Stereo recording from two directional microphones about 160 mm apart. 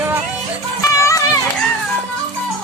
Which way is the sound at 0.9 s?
20° left (ahead or behind).